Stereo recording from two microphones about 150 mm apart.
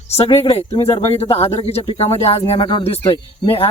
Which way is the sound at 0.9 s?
40° left (ahead or behind).